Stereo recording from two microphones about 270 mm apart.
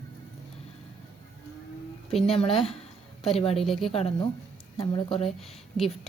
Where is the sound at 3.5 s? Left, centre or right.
Centre.